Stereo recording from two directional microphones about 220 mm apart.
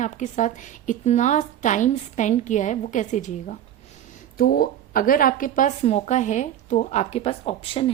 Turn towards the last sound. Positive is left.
turn(degrees=25)  # may be behind; listen again after turning